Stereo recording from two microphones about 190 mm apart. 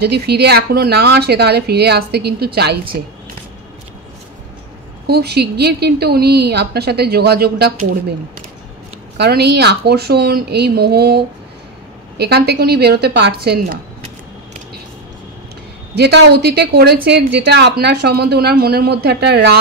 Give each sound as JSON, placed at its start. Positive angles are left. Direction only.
{"t": 0.0, "sound": "a woman's voice", "side_deg": -60}
{"t": 5.0, "sound": "a woman's voice", "side_deg": -60}
{"t": 9.1, "sound": "a woman's voice", "side_deg": -60}
{"t": 16.0, "sound": "a woman's voice", "side_deg": -60}